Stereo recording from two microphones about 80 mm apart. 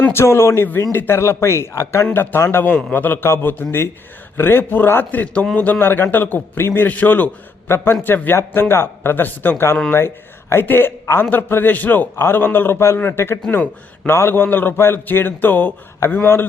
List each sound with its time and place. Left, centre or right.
0.1 s a man's voice: left